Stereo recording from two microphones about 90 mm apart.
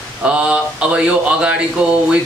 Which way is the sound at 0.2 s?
15° right (ahead or behind).